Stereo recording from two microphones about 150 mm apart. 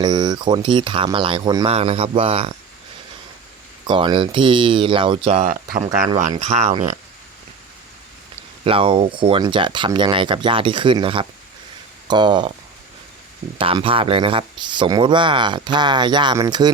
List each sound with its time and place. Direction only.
0.0 s speech: 30° right (ahead or behind)
1.6 s speech: 40° right (ahead or behind)
3.8 s speech: 35° right (ahead or behind); by 6.8 s 50° right (ahead or behind)
8.6 s speech: 35° right (ahead or behind)
13.6 s speech: 35° right (ahead or behind)